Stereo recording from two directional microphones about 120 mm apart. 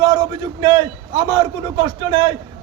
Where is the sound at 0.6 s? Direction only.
30° right (ahead or behind).